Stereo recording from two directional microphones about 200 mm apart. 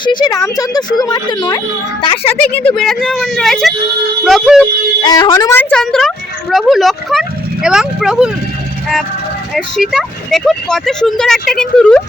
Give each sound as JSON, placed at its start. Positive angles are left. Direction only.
{"t": 0.0, "sound": "speech", "side_deg": 20}
{"t": 2.3, "sound": "speech", "side_deg": 5}
{"t": 5.0, "sound": "speech", "side_deg": 20}
{"t": 9.6, "sound": "speech", "side_deg": 0}